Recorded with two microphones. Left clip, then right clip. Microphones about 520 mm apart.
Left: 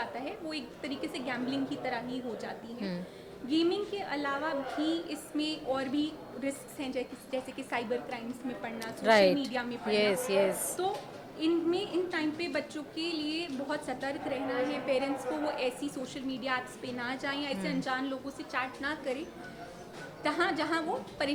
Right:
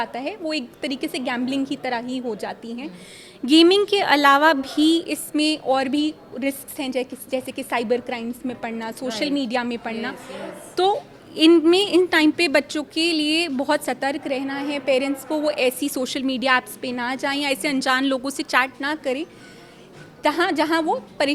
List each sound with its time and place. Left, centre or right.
0.0 s a woman's voice: right
3.4 s a woman's voice: right
10.8 s a woman's voice: right
20.2 s a woman's voice: right